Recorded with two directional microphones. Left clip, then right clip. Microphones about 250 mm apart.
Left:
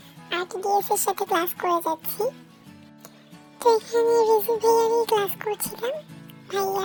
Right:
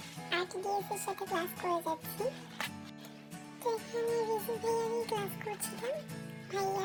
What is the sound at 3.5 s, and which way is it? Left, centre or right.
Music, left.